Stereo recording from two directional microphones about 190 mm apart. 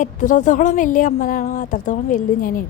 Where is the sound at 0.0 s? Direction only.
40° left (ahead or behind).